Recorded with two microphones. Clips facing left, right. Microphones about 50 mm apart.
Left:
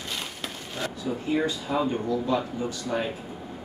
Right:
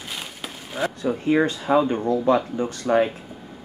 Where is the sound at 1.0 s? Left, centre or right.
Right.